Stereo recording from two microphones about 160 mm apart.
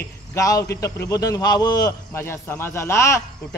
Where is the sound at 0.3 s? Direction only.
20° left (ahead or behind).